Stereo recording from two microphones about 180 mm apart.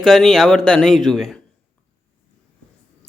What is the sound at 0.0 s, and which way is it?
A man's voice, centre (ahead or behind).